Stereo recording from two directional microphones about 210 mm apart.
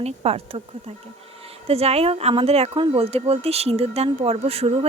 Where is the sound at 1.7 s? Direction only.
30° right (ahead or behind).